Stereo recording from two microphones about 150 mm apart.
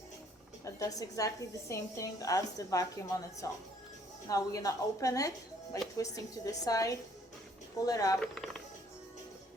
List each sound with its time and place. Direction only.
0.6 s a woman's voice: 25° left (ahead or behind)
8.2 s speech: centre (ahead or behind)